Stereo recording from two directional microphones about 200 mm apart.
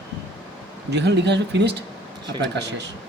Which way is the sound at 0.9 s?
60° right (ahead or behind).